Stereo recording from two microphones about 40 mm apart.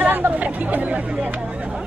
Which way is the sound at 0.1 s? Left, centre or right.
Right.